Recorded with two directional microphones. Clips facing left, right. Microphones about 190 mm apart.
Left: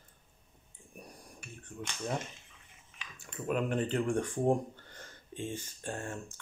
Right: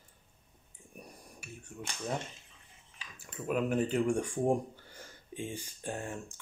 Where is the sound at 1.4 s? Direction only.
5° right (ahead or behind).